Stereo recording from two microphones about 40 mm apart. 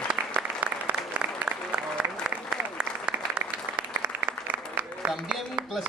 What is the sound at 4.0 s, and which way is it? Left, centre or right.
Applause, right.